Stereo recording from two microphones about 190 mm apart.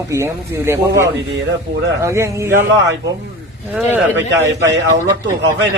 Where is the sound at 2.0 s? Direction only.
15° right (ahead or behind).